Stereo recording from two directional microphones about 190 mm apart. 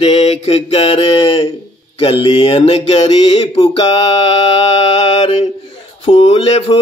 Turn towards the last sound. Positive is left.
turn(degrees=30)  # may be behind; listen again after turning